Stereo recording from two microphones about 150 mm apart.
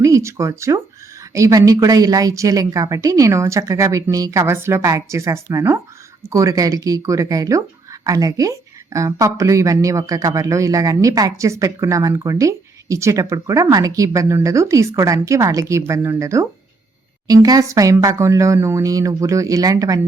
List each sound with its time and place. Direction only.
0.0 s speech: 20° right (ahead or behind)